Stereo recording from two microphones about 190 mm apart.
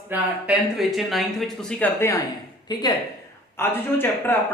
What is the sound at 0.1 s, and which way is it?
Speech, 5° right (ahead or behind).